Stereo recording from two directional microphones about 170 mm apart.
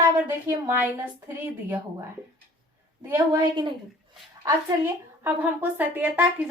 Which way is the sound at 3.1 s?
20° right (ahead or behind).